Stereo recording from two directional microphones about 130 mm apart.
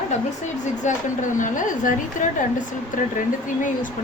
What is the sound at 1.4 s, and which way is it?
Speech, 80° left.